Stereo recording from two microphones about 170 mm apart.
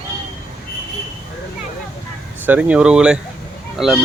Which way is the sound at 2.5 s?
10° right (ahead or behind).